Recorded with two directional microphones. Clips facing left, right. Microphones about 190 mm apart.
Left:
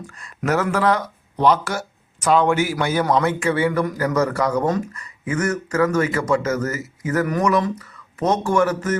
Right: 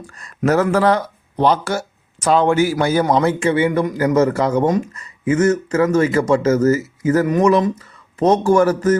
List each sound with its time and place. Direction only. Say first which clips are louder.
0.2 s a man's voice: right 5 dB; 35° right (ahead or behind)